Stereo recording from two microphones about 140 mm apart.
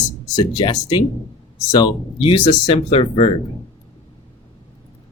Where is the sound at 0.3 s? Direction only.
30° left (ahead or behind).